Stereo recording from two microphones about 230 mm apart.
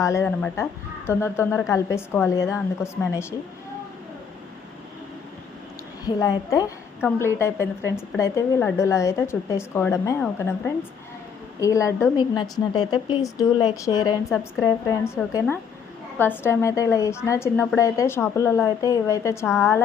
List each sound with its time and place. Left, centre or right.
0.0 s speech: centre
6.1 s speech: centre
11.6 s speech: centre
19.5 s a woman's voice: centre